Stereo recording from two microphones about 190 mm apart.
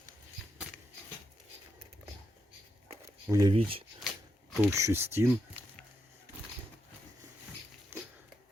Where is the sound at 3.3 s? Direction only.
20° right (ahead or behind).